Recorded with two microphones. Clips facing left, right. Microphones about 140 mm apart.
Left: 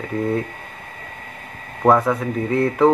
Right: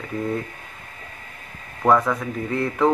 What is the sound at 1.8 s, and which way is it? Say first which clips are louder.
Speech: left 3 dB; 25° left (ahead or behind).